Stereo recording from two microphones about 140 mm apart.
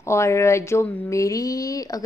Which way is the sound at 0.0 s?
20° left (ahead or behind).